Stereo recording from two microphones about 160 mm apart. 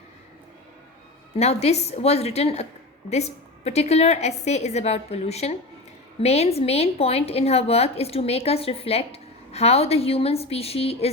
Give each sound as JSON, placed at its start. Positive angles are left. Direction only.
{"t": 1.4, "sound": "a woman's voice", "side_deg": 40}